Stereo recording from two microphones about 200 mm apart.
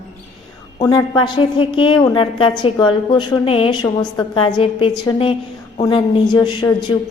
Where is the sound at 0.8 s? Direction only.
20° left (ahead or behind).